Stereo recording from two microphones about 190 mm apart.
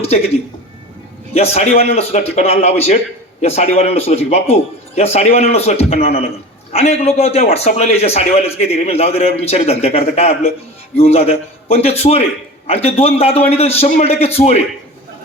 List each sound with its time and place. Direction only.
1.3 s a man's voice: 35° left (ahead or behind)